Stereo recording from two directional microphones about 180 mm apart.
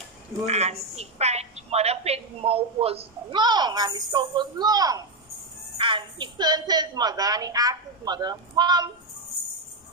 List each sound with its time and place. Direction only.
0.5 s a woman's voice: 35° right (ahead or behind)